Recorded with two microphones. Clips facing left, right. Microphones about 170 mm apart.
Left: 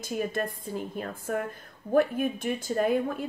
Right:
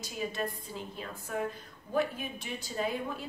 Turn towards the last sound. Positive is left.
turn(degrees=50)  # may be behind; listen again after turning